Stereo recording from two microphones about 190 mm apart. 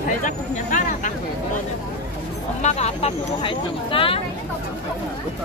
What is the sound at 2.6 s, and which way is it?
Speech, 35° left (ahead or behind).